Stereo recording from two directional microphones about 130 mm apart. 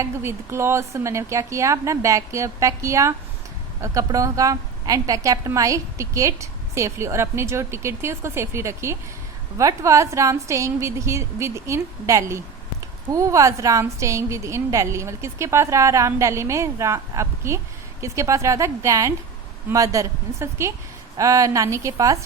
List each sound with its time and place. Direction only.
0.0 s a woman's voice: 20° right (ahead or behind)